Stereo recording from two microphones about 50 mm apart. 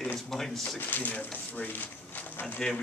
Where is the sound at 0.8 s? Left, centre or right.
Left.